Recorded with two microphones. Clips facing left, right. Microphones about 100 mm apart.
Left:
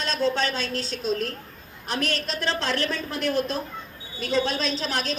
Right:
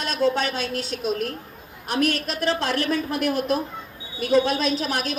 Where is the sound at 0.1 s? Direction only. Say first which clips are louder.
Right 2 dB; 30° left (ahead or behind).